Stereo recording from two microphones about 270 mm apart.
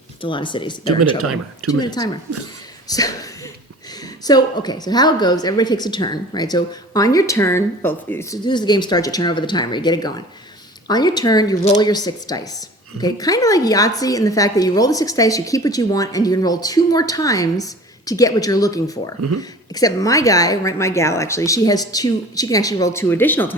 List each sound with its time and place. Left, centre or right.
0.2 s speech: centre